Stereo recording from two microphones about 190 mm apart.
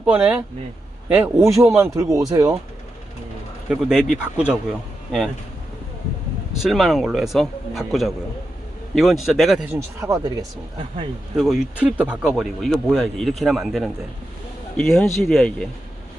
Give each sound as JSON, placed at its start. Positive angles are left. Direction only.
{"t": 0.0, "sound": "speech", "side_deg": -10}
{"t": 3.7, "sound": "speech", "side_deg": -5}
{"t": 6.6, "sound": "speech", "side_deg": 0}
{"t": 10.0, "sound": "speech", "side_deg": -20}
{"t": 11.3, "sound": "speech", "side_deg": 0}